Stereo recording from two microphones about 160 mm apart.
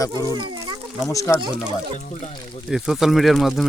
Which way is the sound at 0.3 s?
30° right (ahead or behind).